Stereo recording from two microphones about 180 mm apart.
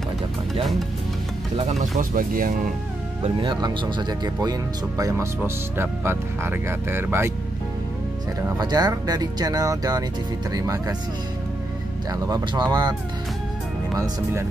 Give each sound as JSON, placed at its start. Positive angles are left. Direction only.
{"t": 1.7, "sound": "speech", "side_deg": -45}
{"t": 3.3, "sound": "speech", "side_deg": -25}
{"t": 8.5, "sound": "speech", "side_deg": -25}
{"t": 12.1, "sound": "speech", "side_deg": -20}
{"t": 13.9, "sound": "speech", "side_deg": -20}